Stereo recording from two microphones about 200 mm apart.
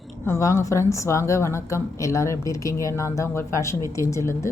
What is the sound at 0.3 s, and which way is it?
A woman's voice, 15° left (ahead or behind).